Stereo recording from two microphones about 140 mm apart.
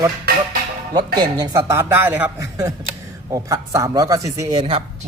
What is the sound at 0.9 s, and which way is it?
A man's voice, 30° right (ahead or behind).